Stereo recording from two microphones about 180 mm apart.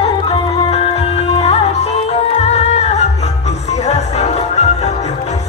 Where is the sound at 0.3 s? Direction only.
35° left (ahead or behind).